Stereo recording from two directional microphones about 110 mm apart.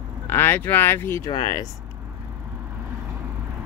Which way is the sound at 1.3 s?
40° left (ahead or behind).